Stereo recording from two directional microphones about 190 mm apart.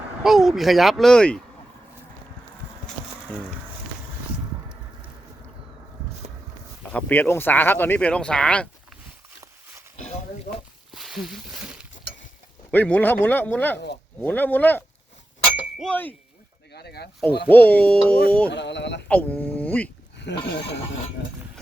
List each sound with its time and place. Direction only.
0.2 s speech: centre (ahead or behind)
6.9 s speech: 10° left (ahead or behind)
10.5 s speech: 45° left (ahead or behind)
10.9 s a sound: centre (ahead or behind)
12.7 s speech: 10° left (ahead or behind)
13.7 s speech: 60° left (ahead or behind)
14.2 s speech: 10° left (ahead or behind)
16.7 s speech: 60° left (ahead or behind)
17.5 s speech: 10° left (ahead or behind)
18.4 s speech: 65° left (ahead or behind)
19.0 s speech: 5° left (ahead or behind)
20.1 s speech: 65° left (ahead or behind)